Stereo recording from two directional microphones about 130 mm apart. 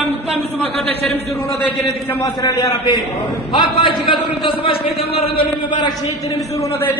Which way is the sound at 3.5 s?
40° left (ahead or behind).